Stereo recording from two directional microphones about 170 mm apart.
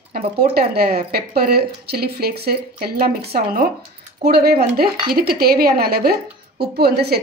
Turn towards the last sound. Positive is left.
turn(degrees=-70)  # may be behind; listen again after turning